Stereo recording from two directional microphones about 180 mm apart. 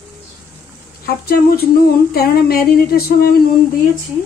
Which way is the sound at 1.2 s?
60° left (ahead or behind).